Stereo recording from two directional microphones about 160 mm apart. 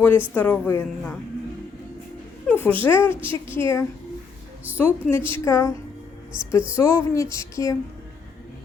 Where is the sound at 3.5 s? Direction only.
15° left (ahead or behind).